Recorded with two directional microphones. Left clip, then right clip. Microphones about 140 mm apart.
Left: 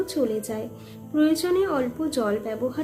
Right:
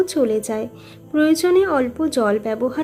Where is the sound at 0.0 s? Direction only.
45° right (ahead or behind).